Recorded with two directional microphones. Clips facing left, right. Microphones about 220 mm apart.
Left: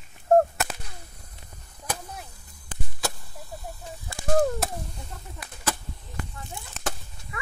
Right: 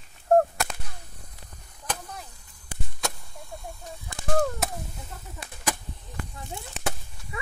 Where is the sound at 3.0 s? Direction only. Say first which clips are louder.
Left 1 dB; 5° left (ahead or behind).